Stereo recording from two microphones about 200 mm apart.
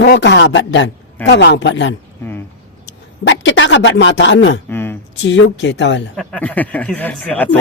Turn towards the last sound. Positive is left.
turn(degrees=10)  # may be behind; listen again after turning